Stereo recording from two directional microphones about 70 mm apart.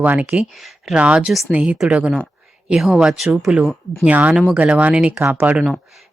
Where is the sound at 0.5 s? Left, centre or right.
Centre.